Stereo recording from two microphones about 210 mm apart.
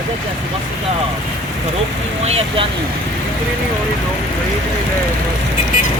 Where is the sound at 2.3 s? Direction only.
25° right (ahead or behind).